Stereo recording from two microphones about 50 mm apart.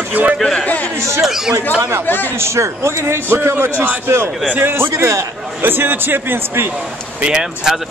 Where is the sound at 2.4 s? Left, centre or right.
Right.